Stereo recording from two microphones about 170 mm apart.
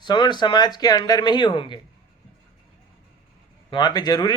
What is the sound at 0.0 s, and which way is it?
Speech, 25° left (ahead or behind).